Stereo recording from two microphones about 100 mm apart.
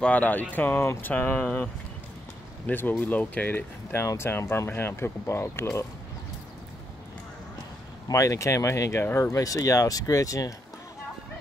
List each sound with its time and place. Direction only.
0.0 s speech: 15° left (ahead or behind)
8.1 s speech: 30° left (ahead or behind)